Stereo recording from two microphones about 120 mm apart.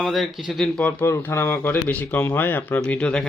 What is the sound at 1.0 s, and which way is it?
Speech, 25° left (ahead or behind).